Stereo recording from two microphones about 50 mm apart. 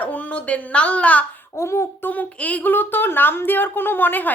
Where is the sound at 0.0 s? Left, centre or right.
Left.